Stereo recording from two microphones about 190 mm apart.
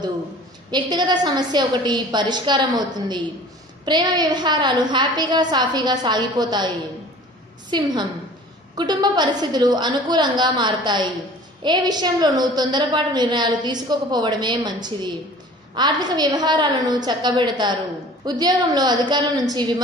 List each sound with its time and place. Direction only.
0.7 s a woman's voice: 20° right (ahead or behind)